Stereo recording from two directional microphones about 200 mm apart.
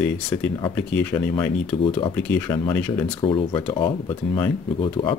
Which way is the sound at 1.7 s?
25° left (ahead or behind).